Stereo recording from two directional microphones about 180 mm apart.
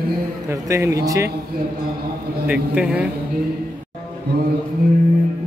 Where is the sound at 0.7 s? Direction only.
15° right (ahead or behind).